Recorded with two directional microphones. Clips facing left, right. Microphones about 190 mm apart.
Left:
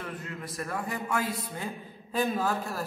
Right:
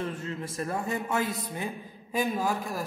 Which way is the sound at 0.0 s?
25° right (ahead or behind).